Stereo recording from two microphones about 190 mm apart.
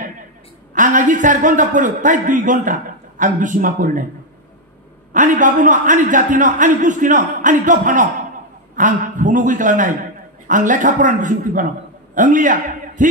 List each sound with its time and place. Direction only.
0.7 s a man's voice: 45° right (ahead or behind)
5.1 s a man's voice: 45° right (ahead or behind)